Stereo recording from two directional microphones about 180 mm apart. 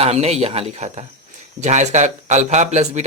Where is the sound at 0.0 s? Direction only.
35° right (ahead or behind).